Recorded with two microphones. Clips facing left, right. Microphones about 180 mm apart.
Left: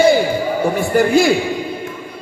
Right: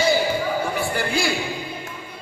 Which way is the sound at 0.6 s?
45° left (ahead or behind).